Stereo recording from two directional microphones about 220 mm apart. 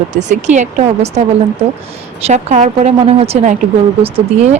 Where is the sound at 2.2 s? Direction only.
30° right (ahead or behind).